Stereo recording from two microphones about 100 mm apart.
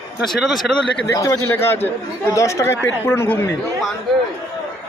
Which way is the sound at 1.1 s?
30° left (ahead or behind).